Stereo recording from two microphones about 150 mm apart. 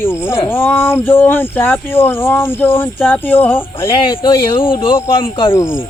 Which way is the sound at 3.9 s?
30° left (ahead or behind).